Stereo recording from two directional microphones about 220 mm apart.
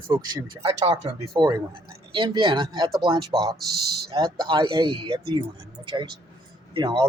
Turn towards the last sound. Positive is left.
turn(degrees=-20)  # may be behind; listen again after turning